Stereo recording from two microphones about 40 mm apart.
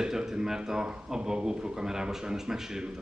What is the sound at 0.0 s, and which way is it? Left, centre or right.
Speech, centre.